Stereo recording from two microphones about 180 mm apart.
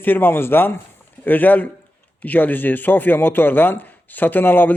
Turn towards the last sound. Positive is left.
turn(degrees=10)  # may be behind; listen again after turning